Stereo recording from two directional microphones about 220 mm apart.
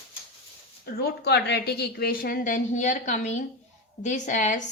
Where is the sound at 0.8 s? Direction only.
45° left (ahead or behind).